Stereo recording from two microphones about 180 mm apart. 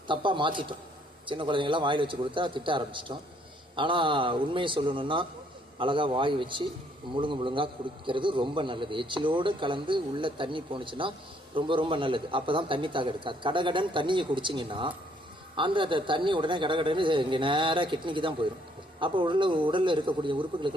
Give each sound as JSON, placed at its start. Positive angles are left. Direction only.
{"t": 0.1, "sound": "a man's voice", "side_deg": -25}